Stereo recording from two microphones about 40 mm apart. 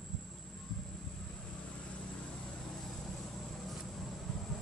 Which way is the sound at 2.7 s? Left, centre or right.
Centre.